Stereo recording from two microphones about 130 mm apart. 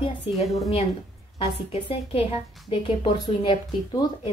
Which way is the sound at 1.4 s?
50° left (ahead or behind).